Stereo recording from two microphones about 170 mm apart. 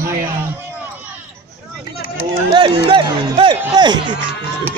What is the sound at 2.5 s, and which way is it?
Speech, 30° right (ahead or behind).